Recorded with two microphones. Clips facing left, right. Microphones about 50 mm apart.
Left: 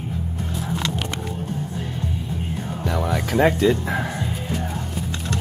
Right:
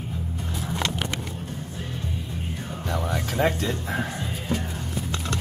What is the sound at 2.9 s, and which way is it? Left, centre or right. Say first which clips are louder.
Music: left 4 dB; left.